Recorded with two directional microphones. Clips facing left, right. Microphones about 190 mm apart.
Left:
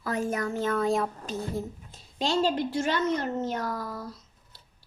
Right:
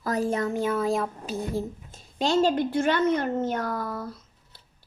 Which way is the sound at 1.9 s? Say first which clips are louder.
Right 4 dB; 45° right (ahead or behind).